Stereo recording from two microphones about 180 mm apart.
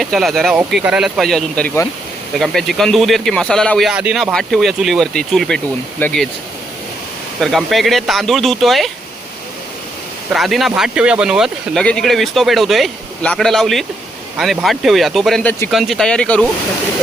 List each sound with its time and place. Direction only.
0.0 s speech: centre (ahead or behind)
7.4 s speech: centre (ahead or behind)
10.3 s speech: centre (ahead or behind)